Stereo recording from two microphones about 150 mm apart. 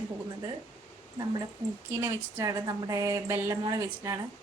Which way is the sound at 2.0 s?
20° right (ahead or behind).